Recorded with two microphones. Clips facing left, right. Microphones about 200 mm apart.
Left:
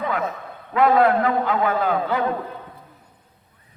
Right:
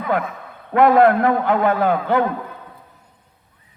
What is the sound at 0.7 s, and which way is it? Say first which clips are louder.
A man's voice: right 4 dB; 55° right (ahead or behind).